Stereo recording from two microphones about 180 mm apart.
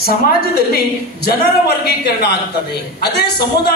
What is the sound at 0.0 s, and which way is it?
A woman's voice, 60° left (ahead or behind).